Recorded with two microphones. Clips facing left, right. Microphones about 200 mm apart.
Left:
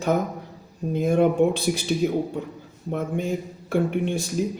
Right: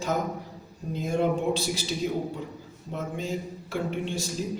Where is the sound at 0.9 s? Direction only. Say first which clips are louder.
Left 7 dB; 60° left (ahead or behind).